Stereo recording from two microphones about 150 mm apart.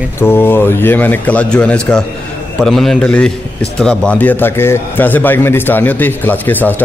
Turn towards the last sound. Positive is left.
turn(degrees=10)  # may be behind; listen again after turning